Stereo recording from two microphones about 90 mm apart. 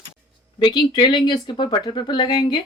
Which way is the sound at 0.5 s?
55° left (ahead or behind).